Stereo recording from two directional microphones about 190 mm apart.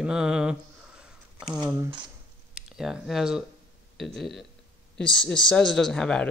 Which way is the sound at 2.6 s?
5° right (ahead or behind).